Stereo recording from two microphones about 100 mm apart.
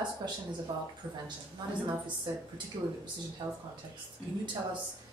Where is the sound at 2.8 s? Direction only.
40° right (ahead or behind).